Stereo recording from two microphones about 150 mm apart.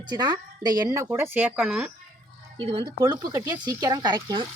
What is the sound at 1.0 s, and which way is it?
Speech, 15° right (ahead or behind).